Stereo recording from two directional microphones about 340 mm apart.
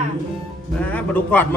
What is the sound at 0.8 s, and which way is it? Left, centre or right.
Speech, centre.